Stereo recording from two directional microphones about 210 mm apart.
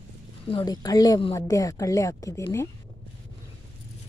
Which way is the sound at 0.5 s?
20° left (ahead or behind).